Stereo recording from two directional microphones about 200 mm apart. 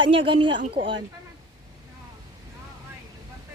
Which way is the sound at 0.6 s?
35° right (ahead or behind).